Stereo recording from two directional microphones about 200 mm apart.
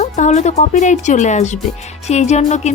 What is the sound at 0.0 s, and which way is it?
Speech, 35° left (ahead or behind).